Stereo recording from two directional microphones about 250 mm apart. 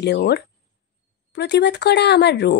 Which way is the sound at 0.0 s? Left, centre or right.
Left.